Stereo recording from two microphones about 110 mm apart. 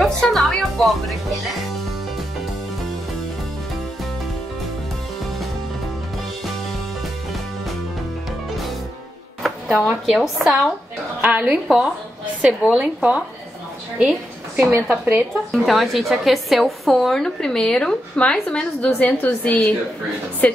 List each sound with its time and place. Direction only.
0.0 s speech: centre (ahead or behind)
9.4 s music: centre (ahead or behind)
10.0 s a woman's voice: centre (ahead or behind)
11.1 s a woman's voice: 15° right (ahead or behind)
14.9 s a woman's voice: 15° right (ahead or behind)
15.5 s a woman's voice: centre (ahead or behind)